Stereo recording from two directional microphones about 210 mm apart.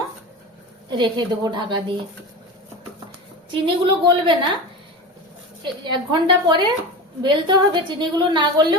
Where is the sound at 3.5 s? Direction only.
25° right (ahead or behind).